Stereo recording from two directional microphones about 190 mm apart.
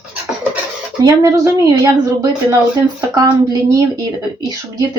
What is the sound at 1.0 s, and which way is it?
A woman's voice, 15° right (ahead or behind).